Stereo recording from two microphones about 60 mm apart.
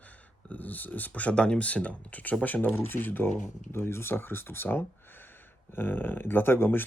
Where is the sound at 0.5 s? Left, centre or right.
Left.